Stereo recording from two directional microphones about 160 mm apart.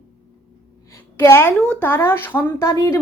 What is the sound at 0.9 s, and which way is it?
A woman's voice, 15° left (ahead or behind).